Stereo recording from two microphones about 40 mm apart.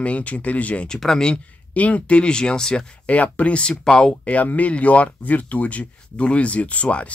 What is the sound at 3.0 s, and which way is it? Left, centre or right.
Speech, left.